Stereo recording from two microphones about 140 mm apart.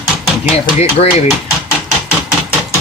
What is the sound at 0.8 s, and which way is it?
Speech, 50° left (ahead or behind).